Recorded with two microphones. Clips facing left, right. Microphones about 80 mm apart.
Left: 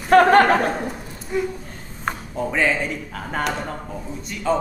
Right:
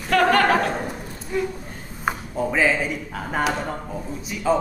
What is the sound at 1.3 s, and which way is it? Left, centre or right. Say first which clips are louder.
Speech: left 1 dB; centre.